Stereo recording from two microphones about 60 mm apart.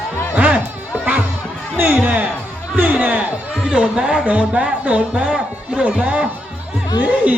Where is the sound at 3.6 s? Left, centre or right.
Centre.